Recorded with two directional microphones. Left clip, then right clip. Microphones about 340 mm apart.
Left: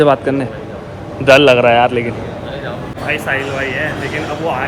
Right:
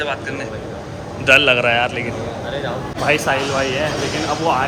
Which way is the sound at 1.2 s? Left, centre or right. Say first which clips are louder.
Left 5 dB; centre.